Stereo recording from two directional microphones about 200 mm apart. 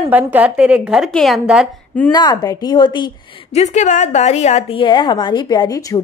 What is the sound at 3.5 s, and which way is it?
A woman's voice, 35° left (ahead or behind).